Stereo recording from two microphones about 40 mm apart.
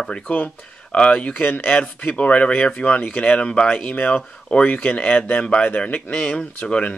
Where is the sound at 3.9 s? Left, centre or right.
Left.